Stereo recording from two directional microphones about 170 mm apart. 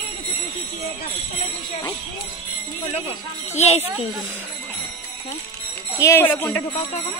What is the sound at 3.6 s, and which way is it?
Speech, 40° left (ahead or behind).